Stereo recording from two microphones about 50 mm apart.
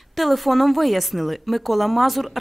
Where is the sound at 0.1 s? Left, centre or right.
Centre.